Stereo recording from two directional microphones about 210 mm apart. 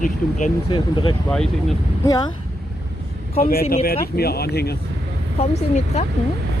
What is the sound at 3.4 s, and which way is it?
Speech, 45° left (ahead or behind).